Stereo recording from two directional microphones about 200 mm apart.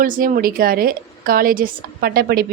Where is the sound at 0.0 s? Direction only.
45° right (ahead or behind).